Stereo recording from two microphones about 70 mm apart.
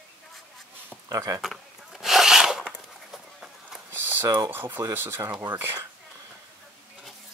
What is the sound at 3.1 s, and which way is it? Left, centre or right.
Run, centre.